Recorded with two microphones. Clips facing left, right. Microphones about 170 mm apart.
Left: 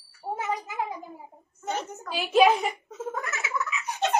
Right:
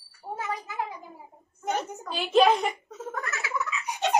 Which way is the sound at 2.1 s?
5° left (ahead or behind).